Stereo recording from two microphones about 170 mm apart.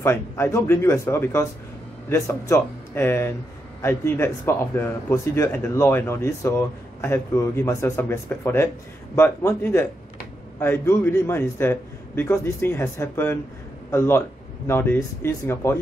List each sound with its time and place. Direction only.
0.0 s speech: 15° left (ahead or behind)